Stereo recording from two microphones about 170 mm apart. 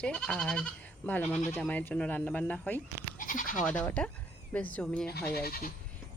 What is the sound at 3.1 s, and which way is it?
Bleat, 55° left (ahead or behind).